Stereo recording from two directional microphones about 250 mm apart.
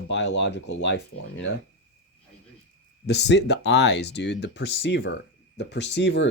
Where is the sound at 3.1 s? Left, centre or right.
Left.